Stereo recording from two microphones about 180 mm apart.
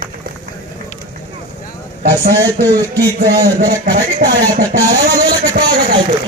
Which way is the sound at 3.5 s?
50° right (ahead or behind).